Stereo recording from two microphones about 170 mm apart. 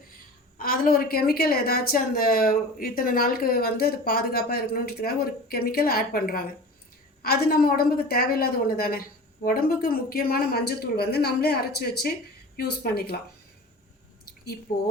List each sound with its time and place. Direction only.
0.6 s a woman's voice: 60° left (ahead or behind)